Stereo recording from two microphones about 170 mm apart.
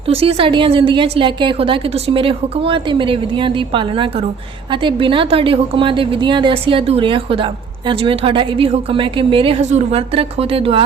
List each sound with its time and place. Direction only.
0.1 s a woman's voice: 35° right (ahead or behind)